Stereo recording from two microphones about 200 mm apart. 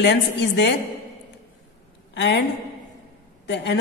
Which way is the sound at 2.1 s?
60° left (ahead or behind).